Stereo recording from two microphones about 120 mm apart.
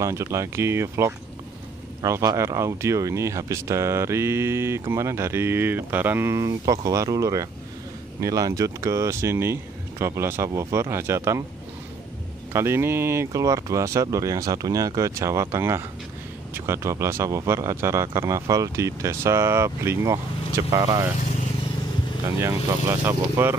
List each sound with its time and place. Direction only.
0.0 s speech: 25° right (ahead or behind)
12.5 s speech: 20° right (ahead or behind)
22.7 s speech: 20° right (ahead or behind)